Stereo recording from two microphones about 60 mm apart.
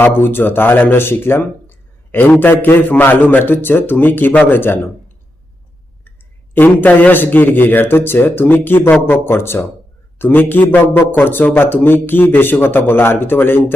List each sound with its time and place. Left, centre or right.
0.0 s a man's voice: left
6.1 s a man's voice: left